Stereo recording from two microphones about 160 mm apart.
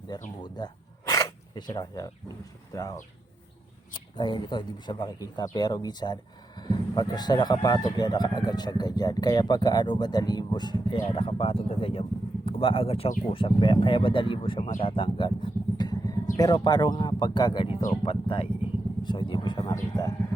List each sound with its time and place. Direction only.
0.1 s speech: 25° left (ahead or behind)
0.4 s a sound: 25° left (ahead or behind)
2.7 s speech: 20° left (ahead or behind)
15.8 s vehicle: 25° left (ahead or behind)
16.4 s speech: 25° left (ahead or behind)